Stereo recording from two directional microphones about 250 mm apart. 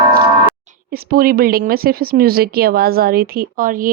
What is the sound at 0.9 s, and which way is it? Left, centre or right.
A woman's voice, right.